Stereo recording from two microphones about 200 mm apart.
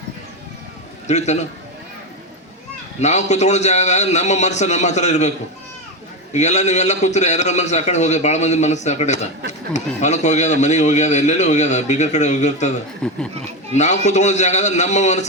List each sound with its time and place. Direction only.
1.0 s speech: 35° left (ahead or behind)
3.0 s speech: 35° left (ahead or behind)
6.3 s speech: 35° left (ahead or behind)
13.0 s speech: 5° left (ahead or behind)
13.7 s speech: 35° left (ahead or behind)